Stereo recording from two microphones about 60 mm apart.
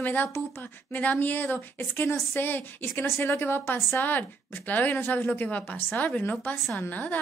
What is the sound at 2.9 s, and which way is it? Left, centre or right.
A woman's voice, left.